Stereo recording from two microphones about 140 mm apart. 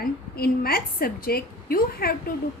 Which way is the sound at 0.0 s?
90° left.